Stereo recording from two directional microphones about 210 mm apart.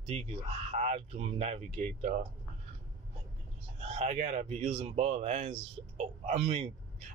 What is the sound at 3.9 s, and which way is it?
Speech, 30° right (ahead or behind).